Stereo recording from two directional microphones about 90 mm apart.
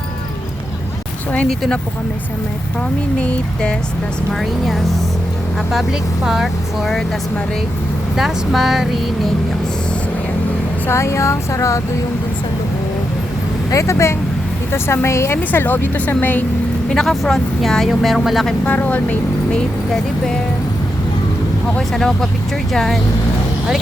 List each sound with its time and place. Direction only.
1.5 s speech: 5° left (ahead or behind)
3.2 s speech: 15° left (ahead or behind)
4.4 s speech: centre (ahead or behind)
8.1 s speech: 5° right (ahead or behind)
10.8 s speech: 30° left (ahead or behind)
13.7 s a woman's voice: 35° left (ahead or behind)
16.9 s speech: 5° left (ahead or behind)
18.6 s speech: 20° left (ahead or behind)
21.8 s speech: 5° left (ahead or behind)